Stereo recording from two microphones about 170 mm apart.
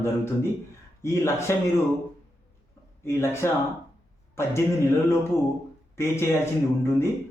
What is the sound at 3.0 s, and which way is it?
Speech, 15° left (ahead or behind).